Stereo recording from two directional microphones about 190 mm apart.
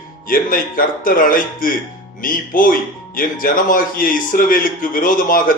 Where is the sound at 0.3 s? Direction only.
45° left (ahead or behind).